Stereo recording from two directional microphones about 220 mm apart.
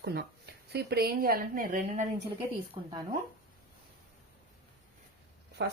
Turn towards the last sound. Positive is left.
turn(degrees=-50)  # may be behind; listen again after turning